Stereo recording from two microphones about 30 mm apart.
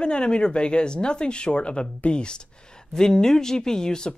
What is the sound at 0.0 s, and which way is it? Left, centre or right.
Speech, left.